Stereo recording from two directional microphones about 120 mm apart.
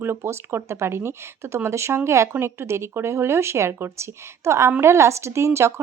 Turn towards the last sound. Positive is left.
turn(degrees=-25)  # may be behind; listen again after turning